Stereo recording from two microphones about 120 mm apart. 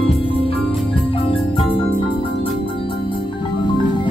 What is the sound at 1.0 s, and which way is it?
Marimba, 50° left (ahead or behind).